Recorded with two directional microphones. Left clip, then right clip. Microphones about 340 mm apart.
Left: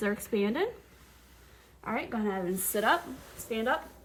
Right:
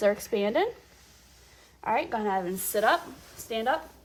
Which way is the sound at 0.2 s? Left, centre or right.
Centre.